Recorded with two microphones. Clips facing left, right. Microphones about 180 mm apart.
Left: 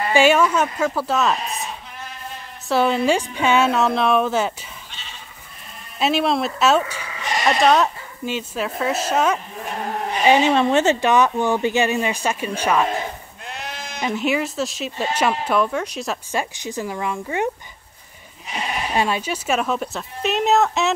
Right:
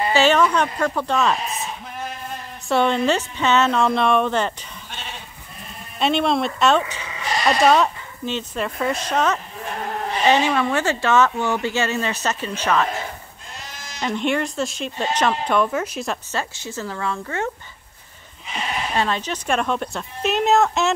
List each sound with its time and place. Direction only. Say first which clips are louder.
0.1 s speech: left 2 dB; 10° left (ahead or behind)
2.7 s speech: left 1 dB; 5° left (ahead or behind)
5.9 s a woman's voice: even; 5° left (ahead or behind)
10.5 s speech: left 4 dB; 25° left (ahead or behind)
13.5 s sheep: left 7 dB; 60° left (ahead or behind)
14.0 s speech: even; 5° left (ahead or behind)
16.3 s speech: left 2 dB; 15° left (ahead or behind)
18.9 s speech: left 2 dB; 10° left (ahead or behind)